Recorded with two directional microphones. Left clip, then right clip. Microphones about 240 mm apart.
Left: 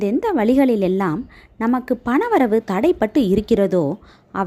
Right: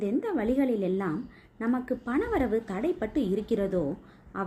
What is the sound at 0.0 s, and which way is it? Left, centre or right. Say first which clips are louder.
A woman's voice: left 10 dB; left.